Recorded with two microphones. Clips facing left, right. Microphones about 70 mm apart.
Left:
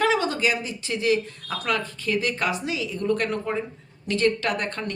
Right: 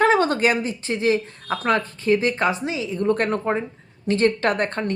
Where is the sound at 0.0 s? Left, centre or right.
Right.